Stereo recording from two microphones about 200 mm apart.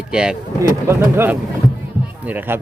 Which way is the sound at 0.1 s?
5° right (ahead or behind).